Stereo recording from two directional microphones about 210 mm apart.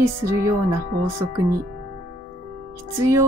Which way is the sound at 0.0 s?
15° right (ahead or behind).